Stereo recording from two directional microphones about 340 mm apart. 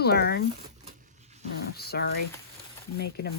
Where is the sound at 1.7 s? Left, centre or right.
Left.